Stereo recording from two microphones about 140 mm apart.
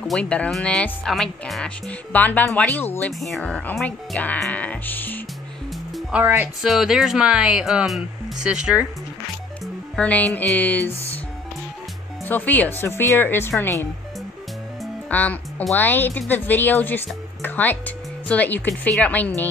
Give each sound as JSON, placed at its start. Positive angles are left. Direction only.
{"t": 0.0, "sound": "speech", "side_deg": 5}
{"t": 3.1, "sound": "speech", "side_deg": 0}
{"t": 6.1, "sound": "speech", "side_deg": -15}
{"t": 6.6, "sound": "speech", "side_deg": 0}
{"t": 9.9, "sound": "speech", "side_deg": 10}
{"t": 12.3, "sound": "speech", "side_deg": 10}
{"t": 15.0, "sound": "speech", "side_deg": 10}